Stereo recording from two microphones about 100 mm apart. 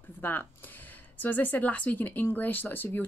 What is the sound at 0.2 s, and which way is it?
Speech, 20° left (ahead or behind).